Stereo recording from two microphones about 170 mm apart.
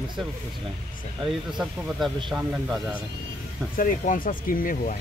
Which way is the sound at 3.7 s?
50° left (ahead or behind).